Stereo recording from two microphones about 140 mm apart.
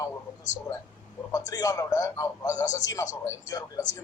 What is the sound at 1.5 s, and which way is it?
A man's voice, 25° left (ahead or behind).